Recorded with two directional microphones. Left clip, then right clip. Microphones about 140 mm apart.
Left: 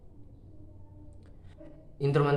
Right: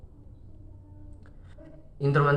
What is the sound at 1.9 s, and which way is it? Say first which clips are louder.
Speech: right 3 dB; 30° left (ahead or behind).